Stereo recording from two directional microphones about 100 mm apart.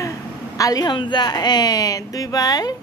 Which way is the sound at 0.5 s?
35° left (ahead or behind).